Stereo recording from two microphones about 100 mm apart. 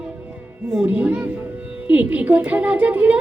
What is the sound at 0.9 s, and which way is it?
A woman's voice, 15° right (ahead or behind).